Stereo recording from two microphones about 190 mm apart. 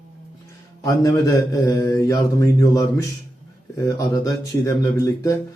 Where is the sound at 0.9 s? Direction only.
15° left (ahead or behind).